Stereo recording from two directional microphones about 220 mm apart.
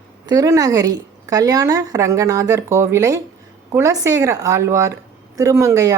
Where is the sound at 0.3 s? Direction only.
15° right (ahead or behind).